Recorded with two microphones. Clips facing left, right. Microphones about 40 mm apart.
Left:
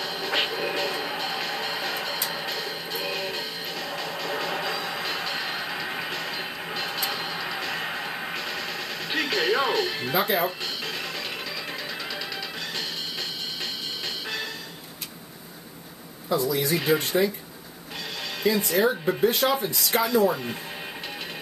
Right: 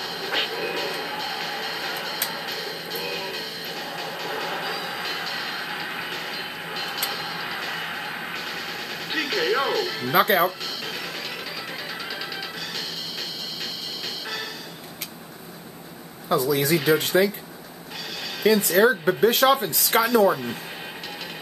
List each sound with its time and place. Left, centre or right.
0.0 s train: centre
2.2 s music: centre
10.1 s speech: right
10.9 s music: centre
11.7 s a sound: centre
14.0 s music: centre
16.3 s speech: right
17.0 s speech: right
18.4 s speech: right